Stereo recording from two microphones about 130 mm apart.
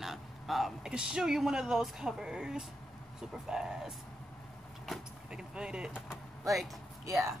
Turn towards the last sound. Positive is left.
turn(degrees=-25)  # may be behind; listen again after turning